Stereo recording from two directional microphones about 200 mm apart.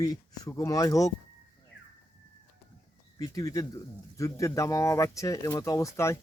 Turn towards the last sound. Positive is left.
turn(degrees=15)  # may be behind; listen again after turning